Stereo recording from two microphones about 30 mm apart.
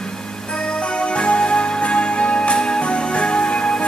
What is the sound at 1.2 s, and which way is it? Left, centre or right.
Music, left.